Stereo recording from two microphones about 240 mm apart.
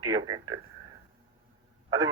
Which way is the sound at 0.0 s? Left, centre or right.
Centre.